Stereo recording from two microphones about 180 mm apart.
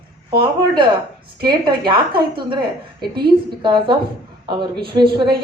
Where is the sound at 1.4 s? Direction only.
25° right (ahead or behind).